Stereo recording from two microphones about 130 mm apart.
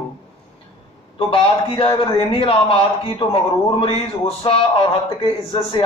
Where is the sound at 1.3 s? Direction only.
45° left (ahead or behind).